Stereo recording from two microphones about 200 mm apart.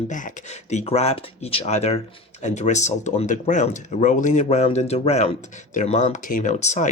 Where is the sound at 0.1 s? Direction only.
40° left (ahead or behind).